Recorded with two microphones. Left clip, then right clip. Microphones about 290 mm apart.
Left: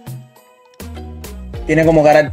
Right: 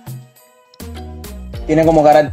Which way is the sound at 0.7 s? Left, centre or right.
Centre.